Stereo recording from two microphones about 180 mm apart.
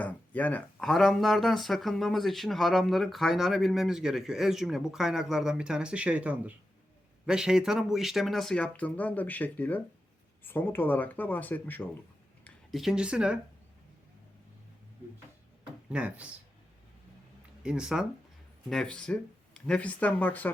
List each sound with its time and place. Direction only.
0.0 s speech: 10° left (ahead or behind)
12.5 s speech: centre (ahead or behind)
15.9 s speech: 5° right (ahead or behind)
17.6 s speech: 5° right (ahead or behind)